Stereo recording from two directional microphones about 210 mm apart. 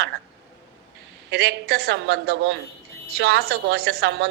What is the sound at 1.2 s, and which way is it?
A woman's voice, 50° right (ahead or behind).